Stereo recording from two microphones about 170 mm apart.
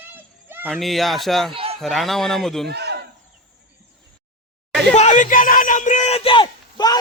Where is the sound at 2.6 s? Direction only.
80° right.